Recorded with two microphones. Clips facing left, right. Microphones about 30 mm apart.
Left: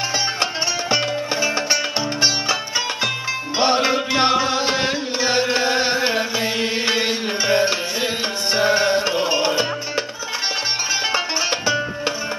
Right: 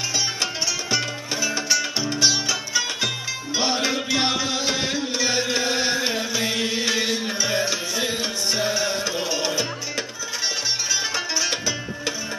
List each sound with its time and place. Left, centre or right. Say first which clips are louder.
0.4 s music: left 4 dB; left
3.5 s music: left 5 dB; left
11.1 s music: left 4 dB; left